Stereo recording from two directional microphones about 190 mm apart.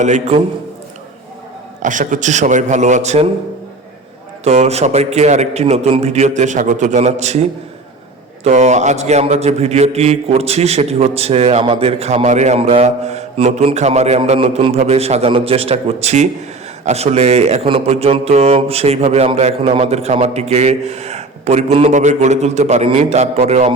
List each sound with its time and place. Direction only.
0.0 s speech: 40° right (ahead or behind)
1.8 s speech: 40° right (ahead or behind)
4.4 s speech: 35° right (ahead or behind)
8.4 s speech: 35° right (ahead or behind)